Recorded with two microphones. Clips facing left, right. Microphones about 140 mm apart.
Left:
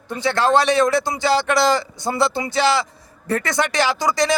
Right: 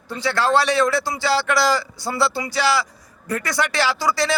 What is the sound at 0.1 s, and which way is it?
A man's voice, 20° left (ahead or behind).